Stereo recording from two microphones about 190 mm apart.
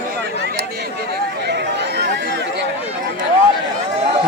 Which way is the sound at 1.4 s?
65° right (ahead or behind).